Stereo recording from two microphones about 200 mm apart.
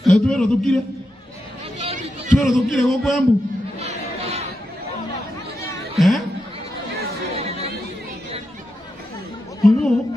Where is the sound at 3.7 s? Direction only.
30° right (ahead or behind).